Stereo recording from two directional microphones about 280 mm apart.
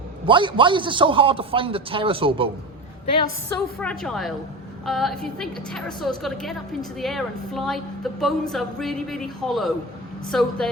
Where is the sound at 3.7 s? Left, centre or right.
Centre.